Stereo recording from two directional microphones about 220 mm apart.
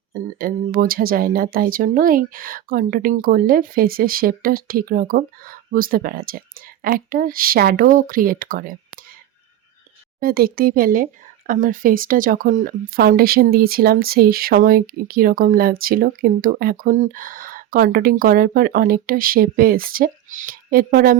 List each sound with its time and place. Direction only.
0.1 s speech: 40° right (ahead or behind)
10.2 s speech: 40° right (ahead or behind)